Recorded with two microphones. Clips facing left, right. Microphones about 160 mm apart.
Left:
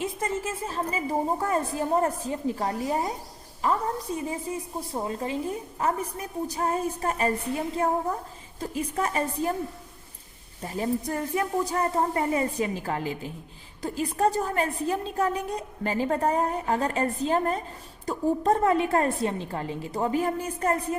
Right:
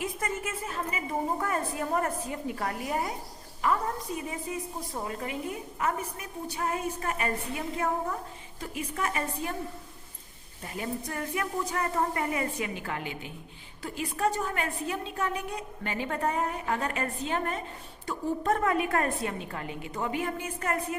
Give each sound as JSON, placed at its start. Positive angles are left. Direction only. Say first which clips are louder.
{"t": 0.0, "sound": "a woman's voice", "louder": "left 4 dB", "side_deg": 25}
{"t": 10.6, "sound": "a woman's voice", "louder": "left 7 dB", "side_deg": 35}